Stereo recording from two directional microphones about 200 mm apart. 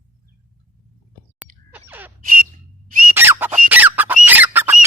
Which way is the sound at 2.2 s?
45° right (ahead or behind).